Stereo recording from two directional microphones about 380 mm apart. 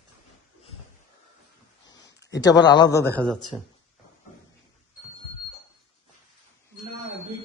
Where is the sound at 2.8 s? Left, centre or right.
Left.